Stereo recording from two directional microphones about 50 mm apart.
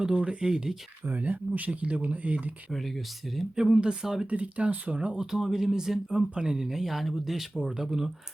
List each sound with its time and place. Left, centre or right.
0.0 s speech: right
1.0 s speech: right
3.5 s speech: centre
4.3 s speech: right
5.1 s speech: centre
6.6 s speech: centre
7.6 s speech: centre